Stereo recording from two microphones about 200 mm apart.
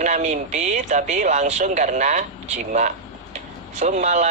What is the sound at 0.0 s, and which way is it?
Speech, 35° right (ahead or behind).